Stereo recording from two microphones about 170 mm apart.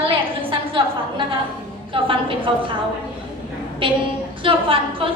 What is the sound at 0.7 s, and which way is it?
A woman's voice, 30° right (ahead or behind).